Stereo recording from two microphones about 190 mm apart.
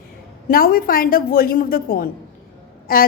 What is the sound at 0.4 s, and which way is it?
A woman's voice, 50° left (ahead or behind).